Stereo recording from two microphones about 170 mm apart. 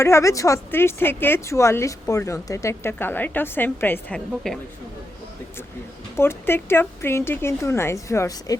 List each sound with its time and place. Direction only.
0.0 s speech: 15° left (ahead or behind)
6.1 s speech: 15° left (ahead or behind)